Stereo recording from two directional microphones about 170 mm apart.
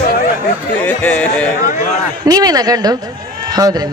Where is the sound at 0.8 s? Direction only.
10° left (ahead or behind).